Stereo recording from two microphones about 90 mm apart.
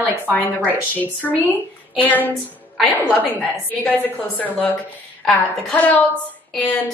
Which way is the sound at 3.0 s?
15° right (ahead or behind).